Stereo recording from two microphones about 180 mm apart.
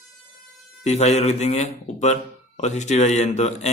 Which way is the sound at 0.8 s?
40° left (ahead or behind).